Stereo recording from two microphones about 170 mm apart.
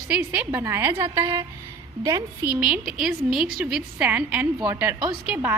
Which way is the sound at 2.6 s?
5° right (ahead or behind).